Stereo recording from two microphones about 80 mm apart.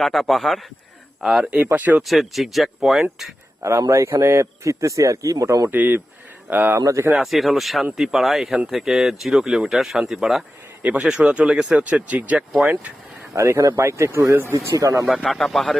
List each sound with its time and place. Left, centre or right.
0.0 s speech: centre
1.5 s speech: centre
2.0 s speech: centre
3.6 s a man's voice: right
5.7 s speech: right
6.7 s a man's voice: right
7.1 s speech: centre
10.8 s speech: centre
13.3 s a man's voice: right
15.2 s speech: centre